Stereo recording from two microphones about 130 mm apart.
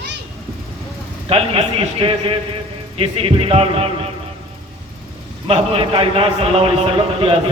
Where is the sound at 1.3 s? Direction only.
45° right (ahead or behind).